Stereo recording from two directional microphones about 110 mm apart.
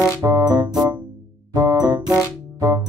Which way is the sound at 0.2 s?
30° right (ahead or behind).